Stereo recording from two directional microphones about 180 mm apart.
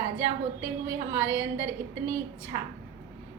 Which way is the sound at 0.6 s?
15° right (ahead or behind).